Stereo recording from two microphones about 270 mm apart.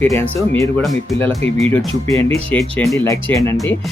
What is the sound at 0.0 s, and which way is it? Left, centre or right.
Speech, centre.